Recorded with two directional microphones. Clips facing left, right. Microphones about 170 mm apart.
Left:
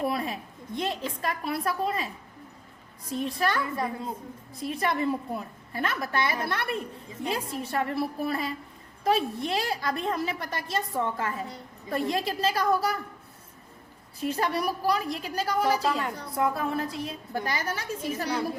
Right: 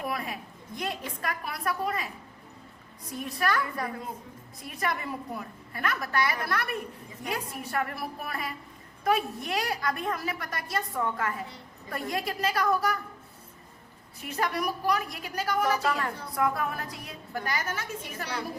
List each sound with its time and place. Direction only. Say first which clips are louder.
0.0 s a sound: left 5 dB; 30° left (ahead or behind)
0.8 s a woman's voice: left 4 dB; 25° left (ahead or behind)
3.1 s a woman's voice: left 2 dB; 25° left (ahead or behind)
14.2 s a woman's voice: left 3 dB; 30° left (ahead or behind)